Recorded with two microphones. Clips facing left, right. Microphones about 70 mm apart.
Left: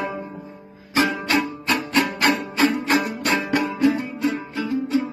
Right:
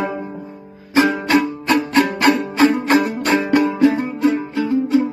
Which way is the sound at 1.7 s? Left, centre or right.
Right.